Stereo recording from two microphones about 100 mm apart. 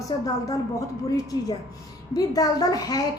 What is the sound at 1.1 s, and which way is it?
A woman's voice, 40° left (ahead or behind).